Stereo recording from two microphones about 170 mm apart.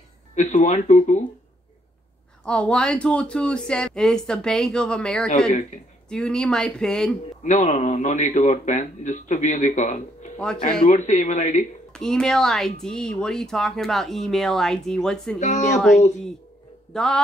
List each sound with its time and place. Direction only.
0.4 s a man's voice: 45° left (ahead or behind)
2.4 s speech: 5° left (ahead or behind)
7.4 s a man's voice: 45° left (ahead or behind)
10.3 s speech: 5° left (ahead or behind)
10.9 s a man's voice: 45° left (ahead or behind)
11.9 s speech: 5° left (ahead or behind)
15.4 s a man's voice: 45° left (ahead or behind)
16.9 s speech: 5° left (ahead or behind)